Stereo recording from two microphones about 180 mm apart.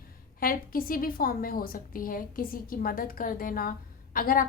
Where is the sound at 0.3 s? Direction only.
55° left (ahead or behind).